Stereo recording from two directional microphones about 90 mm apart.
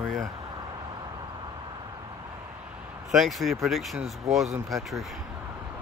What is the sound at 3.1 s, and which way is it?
Speech, centre (ahead or behind).